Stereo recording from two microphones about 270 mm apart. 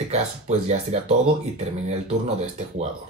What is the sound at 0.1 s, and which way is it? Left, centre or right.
Speech, right.